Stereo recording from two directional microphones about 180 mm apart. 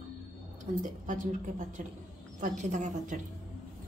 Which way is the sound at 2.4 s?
40° right (ahead or behind).